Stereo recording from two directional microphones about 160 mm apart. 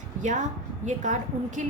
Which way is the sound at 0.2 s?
50° right (ahead or behind).